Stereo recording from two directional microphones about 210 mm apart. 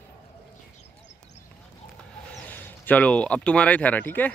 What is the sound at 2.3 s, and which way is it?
A man's voice, 10° left (ahead or behind).